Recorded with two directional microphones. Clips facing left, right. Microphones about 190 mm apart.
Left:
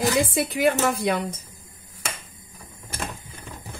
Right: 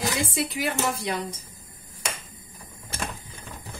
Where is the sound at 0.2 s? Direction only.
55° left (ahead or behind).